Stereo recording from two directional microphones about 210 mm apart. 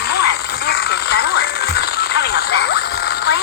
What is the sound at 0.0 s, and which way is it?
Music, 50° left (ahead or behind).